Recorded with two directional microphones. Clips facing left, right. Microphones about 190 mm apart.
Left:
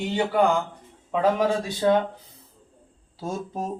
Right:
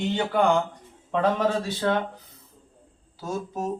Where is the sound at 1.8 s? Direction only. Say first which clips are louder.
Left 5 dB; 20° left (ahead or behind).